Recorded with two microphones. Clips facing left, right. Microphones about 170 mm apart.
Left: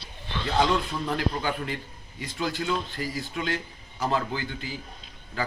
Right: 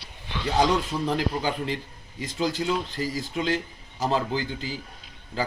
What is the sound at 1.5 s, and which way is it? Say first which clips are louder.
Speech: right 2 dB; 30° right (ahead or behind).